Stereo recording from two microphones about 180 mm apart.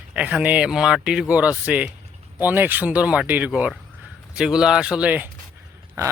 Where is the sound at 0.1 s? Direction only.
5° right (ahead or behind).